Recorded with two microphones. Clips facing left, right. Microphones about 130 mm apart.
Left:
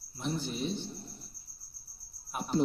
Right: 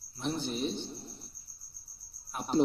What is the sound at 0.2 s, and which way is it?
Speech, 20° right (ahead or behind).